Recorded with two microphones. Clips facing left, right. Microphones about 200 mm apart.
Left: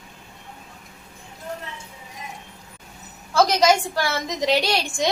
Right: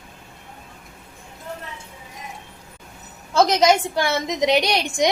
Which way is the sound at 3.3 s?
20° right (ahead or behind).